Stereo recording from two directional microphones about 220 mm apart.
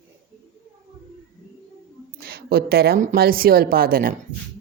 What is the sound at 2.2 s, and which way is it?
A woman's voice, 45° right (ahead or behind).